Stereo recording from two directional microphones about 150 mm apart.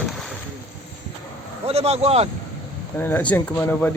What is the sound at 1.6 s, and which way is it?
Speech, 45° right (ahead or behind).